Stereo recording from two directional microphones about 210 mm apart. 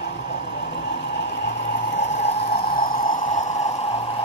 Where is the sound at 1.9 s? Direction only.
35° left (ahead or behind).